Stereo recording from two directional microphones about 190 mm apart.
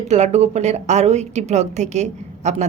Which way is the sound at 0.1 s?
35° right (ahead or behind).